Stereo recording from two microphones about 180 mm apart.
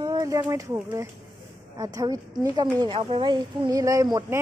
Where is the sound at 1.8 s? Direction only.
15° right (ahead or behind).